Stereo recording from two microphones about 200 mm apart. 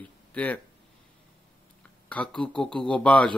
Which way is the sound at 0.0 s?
5° left (ahead or behind).